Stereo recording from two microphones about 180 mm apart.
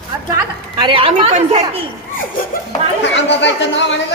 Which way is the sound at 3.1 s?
80° left.